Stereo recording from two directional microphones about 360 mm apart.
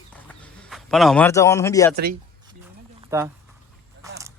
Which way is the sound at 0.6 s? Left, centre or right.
Centre.